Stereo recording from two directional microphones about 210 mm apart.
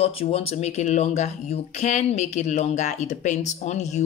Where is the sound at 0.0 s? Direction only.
30° left (ahead or behind).